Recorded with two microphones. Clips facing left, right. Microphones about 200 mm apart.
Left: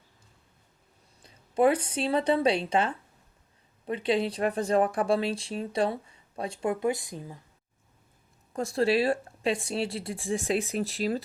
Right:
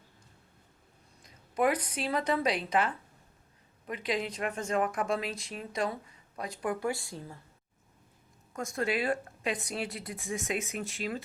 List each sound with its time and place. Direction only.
1.2 s speech: 30° left (ahead or behind)
8.5 s speech: 30° left (ahead or behind)